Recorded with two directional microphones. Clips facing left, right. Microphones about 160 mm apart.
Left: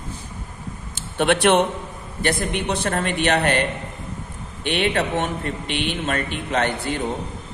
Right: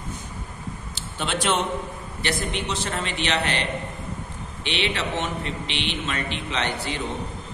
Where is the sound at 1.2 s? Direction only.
60° left (ahead or behind).